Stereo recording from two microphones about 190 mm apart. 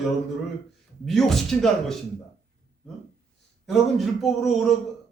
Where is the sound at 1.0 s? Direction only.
Centre (ahead or behind).